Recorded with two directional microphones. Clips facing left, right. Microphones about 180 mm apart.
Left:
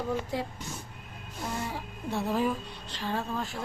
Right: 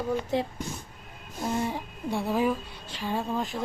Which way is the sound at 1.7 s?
10° right (ahead or behind).